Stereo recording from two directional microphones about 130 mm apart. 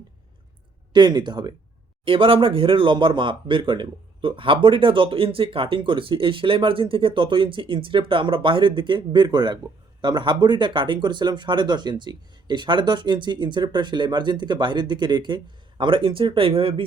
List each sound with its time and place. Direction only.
0.9 s speech: 35° right (ahead or behind)